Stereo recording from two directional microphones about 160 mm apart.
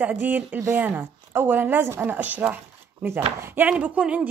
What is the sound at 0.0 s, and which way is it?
Speech, 10° right (ahead or behind).